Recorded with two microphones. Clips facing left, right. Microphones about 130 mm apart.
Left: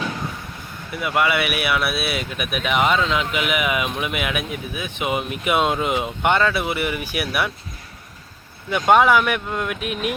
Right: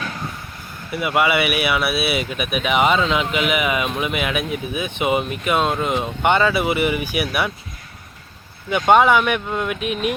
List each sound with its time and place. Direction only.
0.9 s speech: 5° right (ahead or behind)
8.7 s speech: centre (ahead or behind)